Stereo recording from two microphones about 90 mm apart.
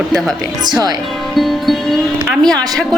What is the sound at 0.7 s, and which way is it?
Speech, 50° right (ahead or behind).